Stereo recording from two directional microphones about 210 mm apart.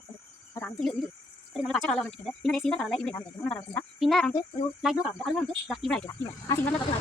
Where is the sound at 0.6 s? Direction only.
5° left (ahead or behind).